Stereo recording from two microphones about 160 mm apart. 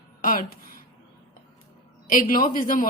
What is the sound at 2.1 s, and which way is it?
Speech, 60° left (ahead or behind).